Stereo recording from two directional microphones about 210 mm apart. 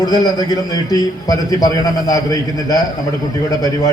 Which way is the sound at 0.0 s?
20° left (ahead or behind).